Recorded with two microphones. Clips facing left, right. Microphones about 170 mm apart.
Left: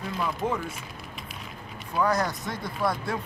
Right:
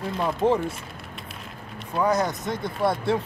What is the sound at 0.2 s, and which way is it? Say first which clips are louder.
Speech: right 7 dB; 30° right (ahead or behind).